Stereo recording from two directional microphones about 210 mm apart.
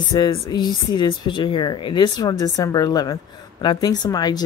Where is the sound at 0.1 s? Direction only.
20° left (ahead or behind).